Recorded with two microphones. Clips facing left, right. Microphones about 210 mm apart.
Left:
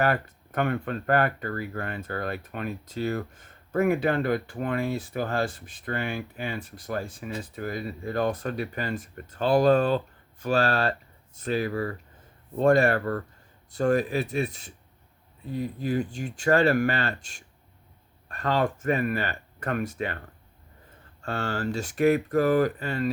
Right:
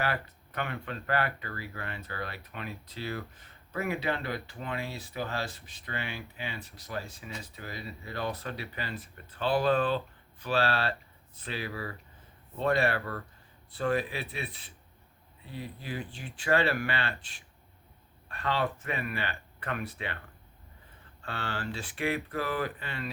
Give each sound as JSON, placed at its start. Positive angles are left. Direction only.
{"t": 0.0, "sound": "speech", "side_deg": 45}
{"t": 21.2, "sound": "speech", "side_deg": 45}